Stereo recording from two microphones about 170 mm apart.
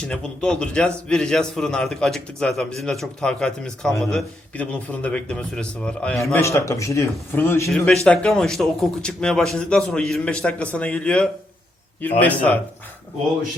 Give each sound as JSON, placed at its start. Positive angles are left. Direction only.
{"t": 0.0, "sound": "a man's voice", "side_deg": 5}
{"t": 6.2, "sound": "a man's voice", "side_deg": 15}